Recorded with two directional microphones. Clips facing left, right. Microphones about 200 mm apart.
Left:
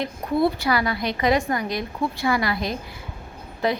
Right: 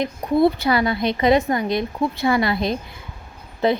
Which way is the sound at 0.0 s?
20° right (ahead or behind).